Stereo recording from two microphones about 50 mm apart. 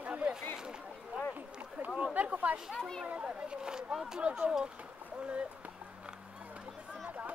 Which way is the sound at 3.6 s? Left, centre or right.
Centre.